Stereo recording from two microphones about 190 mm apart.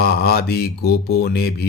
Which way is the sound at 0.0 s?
55° left (ahead or behind).